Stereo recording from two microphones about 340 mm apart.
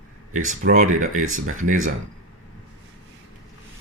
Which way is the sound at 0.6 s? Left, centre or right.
Right.